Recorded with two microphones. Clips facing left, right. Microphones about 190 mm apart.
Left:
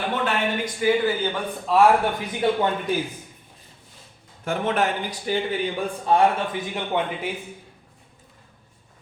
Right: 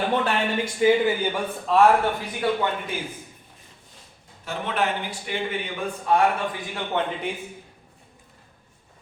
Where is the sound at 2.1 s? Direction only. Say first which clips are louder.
Left 2 dB; 25° left (ahead or behind).